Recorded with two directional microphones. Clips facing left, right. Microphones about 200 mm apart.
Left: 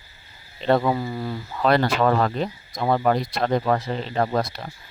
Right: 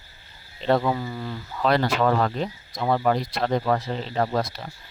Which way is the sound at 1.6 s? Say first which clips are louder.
Left 2 dB; 55° left (ahead or behind).